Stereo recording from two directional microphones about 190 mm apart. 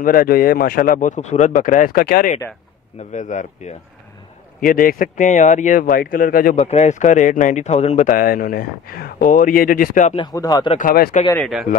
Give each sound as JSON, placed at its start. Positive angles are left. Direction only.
{"t": 0.0, "sound": "speech", "side_deg": 50}
{"t": 6.5, "sound": "speech", "side_deg": 35}
{"t": 10.1, "sound": "speech", "side_deg": 20}
{"t": 10.7, "sound": "speech", "side_deg": 45}
{"t": 11.3, "sound": "speech", "side_deg": 0}